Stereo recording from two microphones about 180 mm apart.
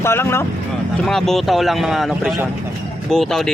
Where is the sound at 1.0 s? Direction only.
Centre (ahead or behind).